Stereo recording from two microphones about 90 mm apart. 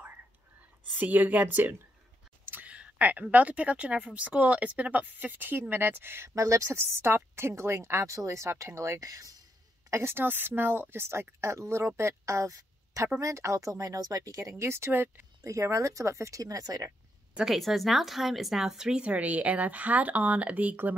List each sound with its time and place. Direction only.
0.9 s a woman's voice: 20° right (ahead or behind)
15.4 s speech: 35° right (ahead or behind)
17.4 s speech: centre (ahead or behind); by 20.9 s 20° right (ahead or behind)